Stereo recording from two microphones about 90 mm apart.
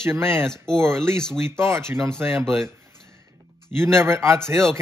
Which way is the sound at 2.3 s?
Centre (ahead or behind).